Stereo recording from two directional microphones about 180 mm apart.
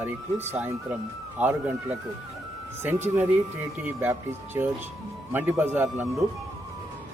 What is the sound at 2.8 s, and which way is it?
Speech, 10° right (ahead or behind).